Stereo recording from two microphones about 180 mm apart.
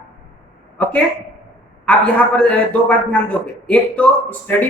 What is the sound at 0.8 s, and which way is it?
A man's voice, 10° left (ahead or behind).